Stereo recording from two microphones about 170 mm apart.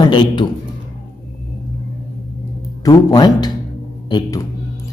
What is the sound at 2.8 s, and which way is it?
Speech, 20° left (ahead or behind).